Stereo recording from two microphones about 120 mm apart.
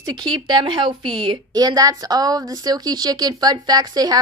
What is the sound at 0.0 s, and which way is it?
A woman's voice, 35° right (ahead or behind).